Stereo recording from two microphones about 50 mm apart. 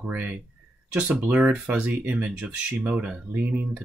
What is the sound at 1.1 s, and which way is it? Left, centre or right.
Speech, centre.